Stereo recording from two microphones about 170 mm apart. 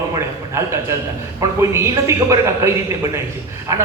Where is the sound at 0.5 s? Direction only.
15° right (ahead or behind).